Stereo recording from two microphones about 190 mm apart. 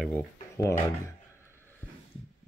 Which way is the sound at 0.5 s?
15° left (ahead or behind).